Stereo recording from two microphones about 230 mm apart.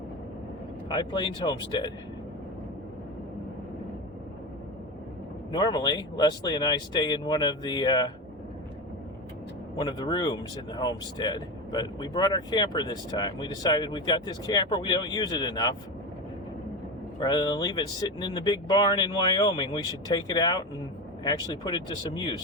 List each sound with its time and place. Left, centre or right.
0.9 s speech: centre
5.5 s speech: centre
9.7 s speech: centre
17.2 s speech: centre